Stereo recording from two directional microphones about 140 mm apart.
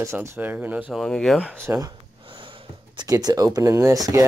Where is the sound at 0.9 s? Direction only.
5° left (ahead or behind).